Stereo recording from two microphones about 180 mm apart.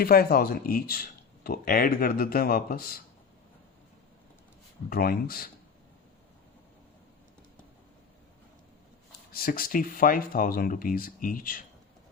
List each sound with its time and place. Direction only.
0.0 s speech: 55° left (ahead or behind)
4.9 s speech: 55° left (ahead or behind)
9.3 s speech: 55° left (ahead or behind)